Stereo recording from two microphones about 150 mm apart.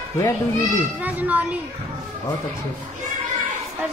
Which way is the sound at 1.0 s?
10° right (ahead or behind).